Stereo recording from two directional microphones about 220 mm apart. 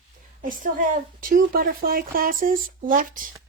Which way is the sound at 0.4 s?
35° right (ahead or behind).